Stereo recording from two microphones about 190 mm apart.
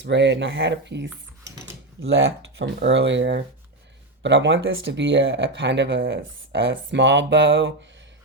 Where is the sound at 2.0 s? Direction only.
90° right.